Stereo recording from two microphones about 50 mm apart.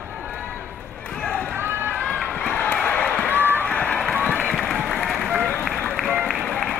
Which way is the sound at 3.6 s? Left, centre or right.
Left.